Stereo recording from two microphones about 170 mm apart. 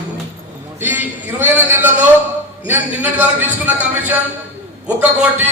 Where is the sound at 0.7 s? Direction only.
10° right (ahead or behind).